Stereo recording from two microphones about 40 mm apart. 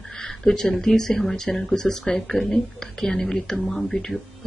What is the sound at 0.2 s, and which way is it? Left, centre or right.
Speech, centre.